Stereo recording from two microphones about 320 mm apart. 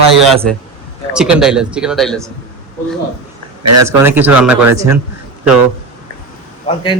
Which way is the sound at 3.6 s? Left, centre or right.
Right.